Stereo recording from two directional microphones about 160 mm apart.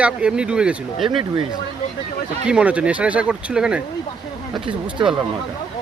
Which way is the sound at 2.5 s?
5° right (ahead or behind).